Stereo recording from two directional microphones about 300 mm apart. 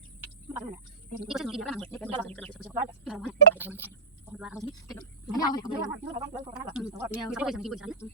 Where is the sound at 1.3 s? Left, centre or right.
Centre.